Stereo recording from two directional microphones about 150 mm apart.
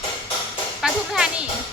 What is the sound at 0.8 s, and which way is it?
Music, centre (ahead or behind).